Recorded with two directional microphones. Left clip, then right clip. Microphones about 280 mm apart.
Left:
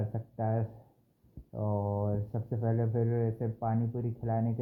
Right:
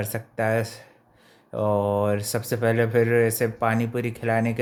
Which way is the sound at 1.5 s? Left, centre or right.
Right.